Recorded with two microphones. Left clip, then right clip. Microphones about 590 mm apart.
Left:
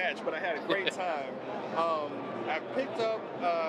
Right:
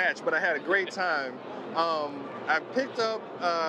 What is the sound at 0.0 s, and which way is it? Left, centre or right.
Speech, right.